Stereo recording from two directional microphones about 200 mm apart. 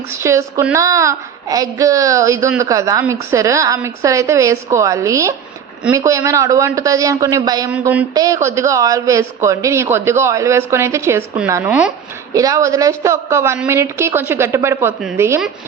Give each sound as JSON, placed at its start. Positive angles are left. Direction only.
{"t": 0.2, "sound": "a man's voice", "side_deg": -15}
{"t": 7.7, "sound": "a man's voice", "side_deg": -5}